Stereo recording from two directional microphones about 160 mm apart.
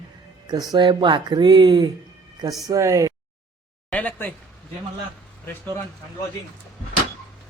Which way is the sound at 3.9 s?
10° left (ahead or behind).